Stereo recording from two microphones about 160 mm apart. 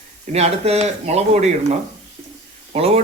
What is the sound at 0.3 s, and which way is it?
Speech, 40° right (ahead or behind).